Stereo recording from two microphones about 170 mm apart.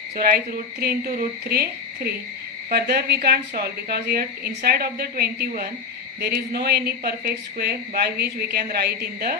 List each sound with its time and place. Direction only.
0.2 s a woman's voice: 60° right (ahead or behind)
2.6 s speech: 70° right (ahead or behind)